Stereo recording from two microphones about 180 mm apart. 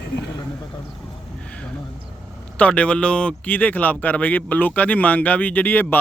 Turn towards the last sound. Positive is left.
turn(degrees=10)  # may be behind; listen again after turning